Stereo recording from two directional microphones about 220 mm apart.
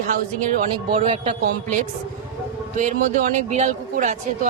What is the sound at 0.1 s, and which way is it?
Speech, 35° right (ahead or behind).